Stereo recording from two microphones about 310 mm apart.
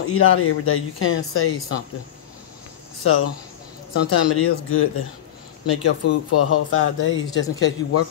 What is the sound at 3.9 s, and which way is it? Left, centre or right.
Speech, left.